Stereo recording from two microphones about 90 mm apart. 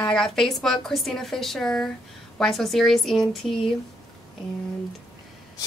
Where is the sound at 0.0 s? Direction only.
10° left (ahead or behind).